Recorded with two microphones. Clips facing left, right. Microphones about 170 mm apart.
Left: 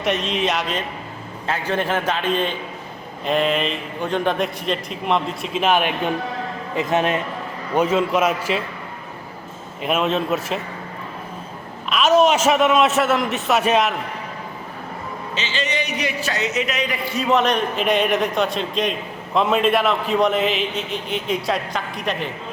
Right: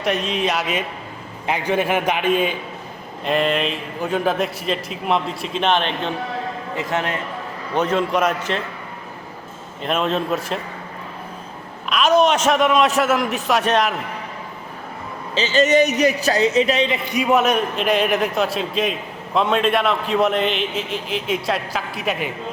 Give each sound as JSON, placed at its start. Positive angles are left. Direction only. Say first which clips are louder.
{"t": 0.0, "sound": "a man's voice", "louder": "even", "side_deg": 0}
{"t": 6.7, "sound": "a man's voice", "louder": "left 5 dB", "side_deg": 20}
{"t": 7.7, "sound": "a man's voice", "louder": "left 1 dB", "side_deg": 5}
{"t": 9.8, "sound": "a man's voice", "louder": "left 1 dB", "side_deg": 5}
{"t": 11.9, "sound": "a man's voice", "louder": "even", "side_deg": 0}
{"t": 15.4, "sound": "a man's voice", "louder": "right 11 dB", "side_deg": -40}
{"t": 17.2, "sound": "a man's voice", "louder": "right 1 dB", "side_deg": -10}